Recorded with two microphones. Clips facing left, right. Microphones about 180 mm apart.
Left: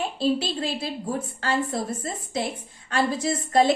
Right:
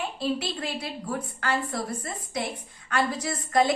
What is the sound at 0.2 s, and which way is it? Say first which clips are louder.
A woman's voice: left 6 dB; 30° left (ahead or behind).